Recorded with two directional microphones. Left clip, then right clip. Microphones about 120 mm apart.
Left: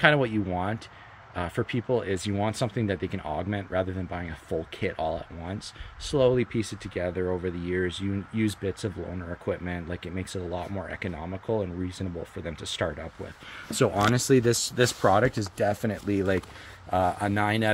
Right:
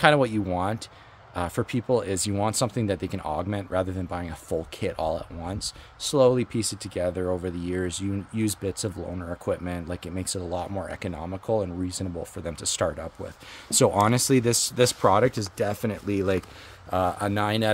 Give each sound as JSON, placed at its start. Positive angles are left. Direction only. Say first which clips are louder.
{"t": 0.0, "sound": "speech", "louder": "right 2 dB", "side_deg": -50}
{"t": 14.0, "sound": "speech", "louder": "even", "side_deg": -25}